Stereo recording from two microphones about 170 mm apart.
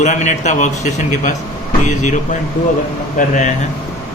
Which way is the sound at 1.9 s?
45° left (ahead or behind).